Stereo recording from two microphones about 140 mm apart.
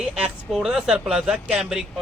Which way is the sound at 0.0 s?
5° right (ahead or behind).